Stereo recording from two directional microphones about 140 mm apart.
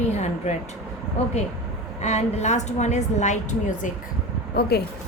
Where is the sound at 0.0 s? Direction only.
55° left (ahead or behind).